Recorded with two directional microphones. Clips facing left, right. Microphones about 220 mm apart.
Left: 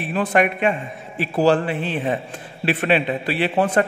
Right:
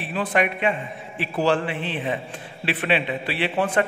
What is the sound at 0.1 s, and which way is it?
A man's voice, 45° left (ahead or behind).